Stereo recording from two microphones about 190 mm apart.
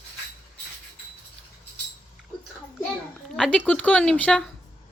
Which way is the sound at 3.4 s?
5° left (ahead or behind).